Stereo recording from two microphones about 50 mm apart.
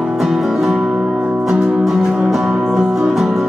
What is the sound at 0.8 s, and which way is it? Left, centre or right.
Music, centre.